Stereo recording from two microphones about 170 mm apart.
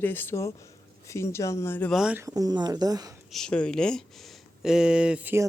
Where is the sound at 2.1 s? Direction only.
20° right (ahead or behind).